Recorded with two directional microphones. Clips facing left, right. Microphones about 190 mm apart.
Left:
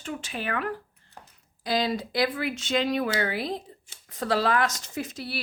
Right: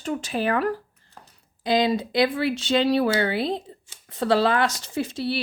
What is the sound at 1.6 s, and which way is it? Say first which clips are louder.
Speech: right 5 dB; 20° right (ahead or behind).